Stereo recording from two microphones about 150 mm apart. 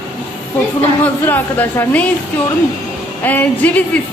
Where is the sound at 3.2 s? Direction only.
10° left (ahead or behind).